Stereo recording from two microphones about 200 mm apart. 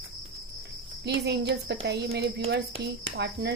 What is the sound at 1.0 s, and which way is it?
A woman's voice, 55° right (ahead or behind).